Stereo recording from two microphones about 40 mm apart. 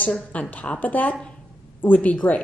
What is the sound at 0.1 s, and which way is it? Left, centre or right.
A woman's voice, left.